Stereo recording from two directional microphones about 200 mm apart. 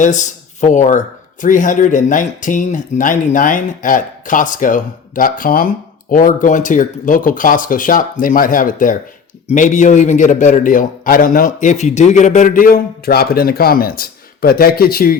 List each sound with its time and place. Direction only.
0.0 s a man's voice: 40° left (ahead or behind)